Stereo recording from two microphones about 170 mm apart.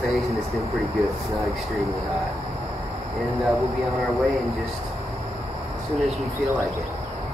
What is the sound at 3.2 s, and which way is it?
Speech, centre (ahead or behind).